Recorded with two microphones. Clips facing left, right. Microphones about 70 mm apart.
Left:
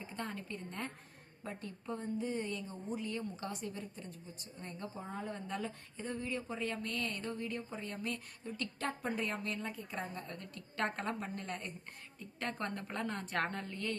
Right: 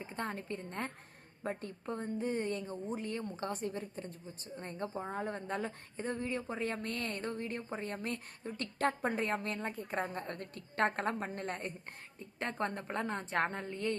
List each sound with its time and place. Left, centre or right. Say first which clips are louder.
0.0 s a woman's voice: right 3 dB; right
12.4 s a woman's voice: right 3 dB; right